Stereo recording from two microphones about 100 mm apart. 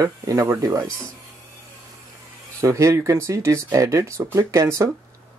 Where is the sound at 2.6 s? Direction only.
30° right (ahead or behind).